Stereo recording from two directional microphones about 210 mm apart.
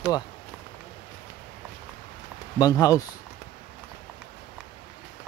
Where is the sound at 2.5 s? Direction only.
15° left (ahead or behind).